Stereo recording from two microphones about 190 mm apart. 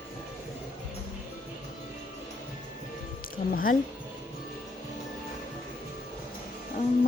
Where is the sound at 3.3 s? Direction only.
50° left (ahead or behind).